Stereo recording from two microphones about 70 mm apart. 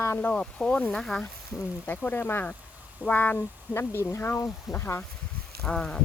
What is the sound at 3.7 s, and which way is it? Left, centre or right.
Speech, left.